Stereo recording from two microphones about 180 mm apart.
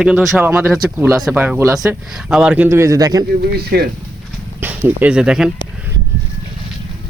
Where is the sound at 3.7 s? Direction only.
60° right (ahead or behind).